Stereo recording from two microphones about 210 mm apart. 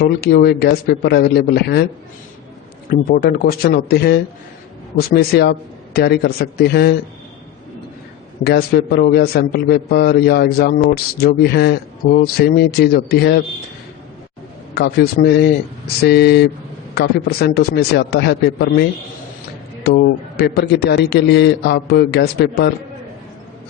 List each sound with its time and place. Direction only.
0.0 s a man's voice: 50° left (ahead or behind)
2.9 s a man's voice: 45° left (ahead or behind)
8.4 s a man's voice: 50° left (ahead or behind)
14.8 s a man's voice: 50° left (ahead or behind)